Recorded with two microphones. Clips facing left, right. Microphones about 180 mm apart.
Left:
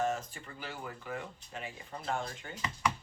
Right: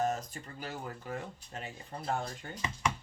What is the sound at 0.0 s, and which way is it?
Speech, 40° right (ahead or behind).